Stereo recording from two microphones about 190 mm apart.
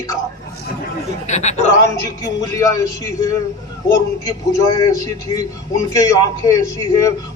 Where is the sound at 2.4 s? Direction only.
15° left (ahead or behind).